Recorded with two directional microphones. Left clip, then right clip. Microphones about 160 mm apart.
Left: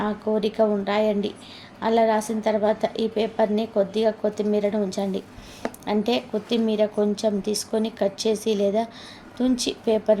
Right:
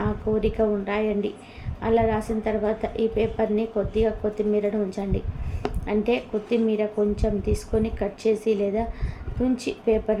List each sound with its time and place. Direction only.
0.0 s speech: 30° left (ahead or behind)